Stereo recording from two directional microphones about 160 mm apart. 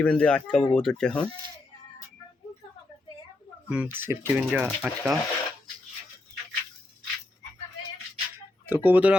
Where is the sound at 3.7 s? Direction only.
10° right (ahead or behind).